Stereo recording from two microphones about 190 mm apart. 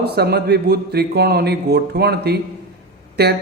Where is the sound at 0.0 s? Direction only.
55° right (ahead or behind).